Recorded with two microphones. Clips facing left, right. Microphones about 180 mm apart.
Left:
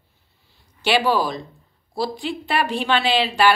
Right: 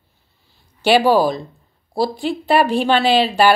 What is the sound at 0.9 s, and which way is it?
Speech, 40° right (ahead or behind).